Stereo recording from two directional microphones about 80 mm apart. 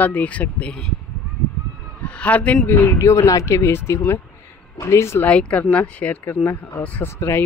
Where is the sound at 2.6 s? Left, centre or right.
Left.